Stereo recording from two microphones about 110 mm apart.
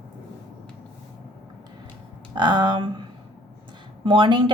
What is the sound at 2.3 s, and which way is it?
Speech, 45° right (ahead or behind).